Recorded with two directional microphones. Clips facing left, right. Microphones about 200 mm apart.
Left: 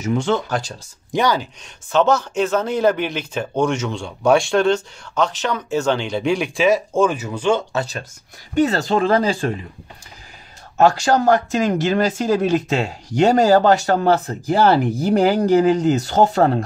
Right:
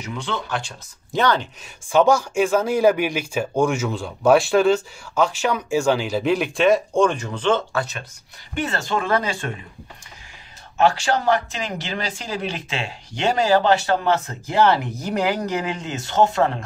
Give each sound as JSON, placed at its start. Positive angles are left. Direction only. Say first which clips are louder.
{"t": 0.0, "sound": "speech", "louder": "left 9 dB", "side_deg": 45}
{"t": 1.1, "sound": "speech", "louder": "left 1 dB", "side_deg": 10}
{"t": 1.9, "sound": "speech", "louder": "even", "side_deg": -10}
{"t": 7.7, "sound": "speech", "louder": "left 2 dB", "side_deg": 30}
{"t": 10.8, "sound": "speech", "louder": "left 4 dB", "side_deg": 40}